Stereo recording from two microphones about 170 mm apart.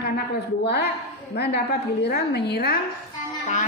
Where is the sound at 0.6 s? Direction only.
75° left (ahead or behind).